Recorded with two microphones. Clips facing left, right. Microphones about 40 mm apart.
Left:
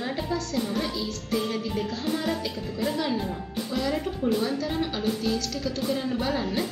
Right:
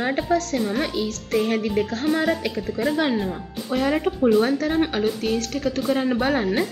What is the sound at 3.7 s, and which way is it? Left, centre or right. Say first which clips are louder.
Speech: right 7 dB; right.